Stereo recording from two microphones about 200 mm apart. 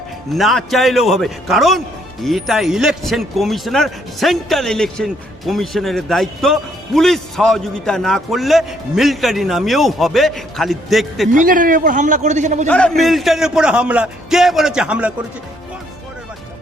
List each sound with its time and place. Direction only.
0.3 s speech: centre (ahead or behind)
11.3 s a man's voice: 45° right (ahead or behind)
12.6 s speech: 5° left (ahead or behind)